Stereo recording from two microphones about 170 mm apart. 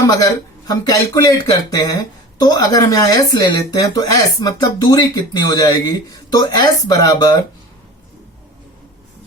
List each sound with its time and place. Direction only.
0.7 s speech: 25° left (ahead or behind)